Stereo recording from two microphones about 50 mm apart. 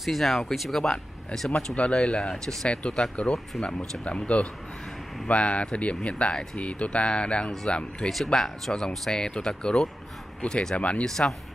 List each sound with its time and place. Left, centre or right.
0.0 s speech: centre
0.8 s speech: centre
3.2 s speech: left
8.1 s speech: centre
10.8 s speech: left
11.1 s speech: centre